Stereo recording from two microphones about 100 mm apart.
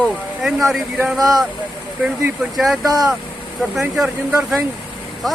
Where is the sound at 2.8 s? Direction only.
40° right (ahead or behind).